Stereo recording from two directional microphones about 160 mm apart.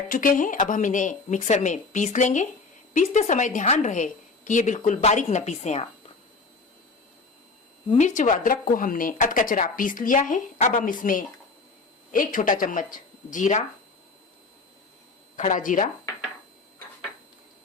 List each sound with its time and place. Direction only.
0.1 s a woman's voice: 60° left (ahead or behind)
7.9 s speech: 50° left (ahead or behind)
15.4 s a woman's voice: 50° left (ahead or behind)